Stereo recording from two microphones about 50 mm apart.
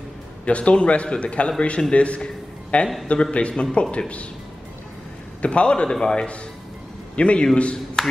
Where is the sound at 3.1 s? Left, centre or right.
Left.